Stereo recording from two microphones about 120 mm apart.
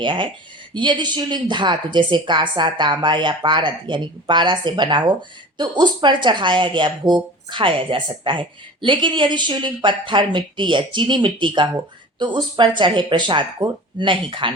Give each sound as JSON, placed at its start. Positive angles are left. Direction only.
{"t": 0.0, "sound": "a woman's voice", "side_deg": -45}